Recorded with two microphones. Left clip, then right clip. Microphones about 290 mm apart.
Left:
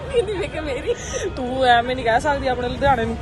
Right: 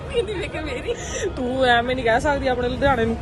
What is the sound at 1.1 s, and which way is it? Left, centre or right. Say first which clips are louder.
A woman's voice: even; centre.